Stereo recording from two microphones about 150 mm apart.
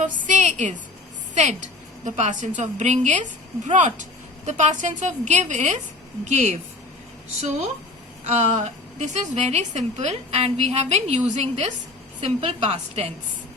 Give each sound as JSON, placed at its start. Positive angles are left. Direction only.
{"t": 0.0, "sound": "a woman's voice", "side_deg": -55}
{"t": 2.0, "sound": "a woman's voice", "side_deg": -55}
{"t": 8.3, "sound": "a woman's voice", "side_deg": -50}